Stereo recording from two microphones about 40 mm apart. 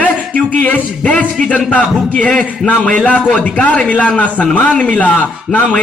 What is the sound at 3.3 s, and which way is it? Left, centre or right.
Speech, left.